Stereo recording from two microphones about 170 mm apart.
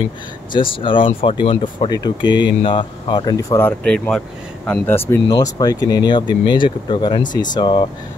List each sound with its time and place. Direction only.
0.5 s speech: 30° left (ahead or behind)